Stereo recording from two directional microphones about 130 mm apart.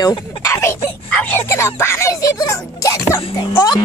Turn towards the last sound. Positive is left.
turn(degrees=35)  # may be behind; listen again after turning